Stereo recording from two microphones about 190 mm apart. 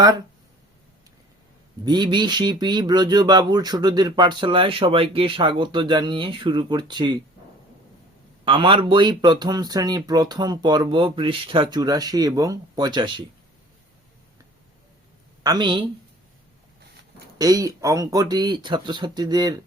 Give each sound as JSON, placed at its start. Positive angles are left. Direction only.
{"t": 1.8, "sound": "speech", "side_deg": -20}
{"t": 8.4, "sound": "speech", "side_deg": -25}
{"t": 15.4, "sound": "speech", "side_deg": -25}
{"t": 17.3, "sound": "speech", "side_deg": -20}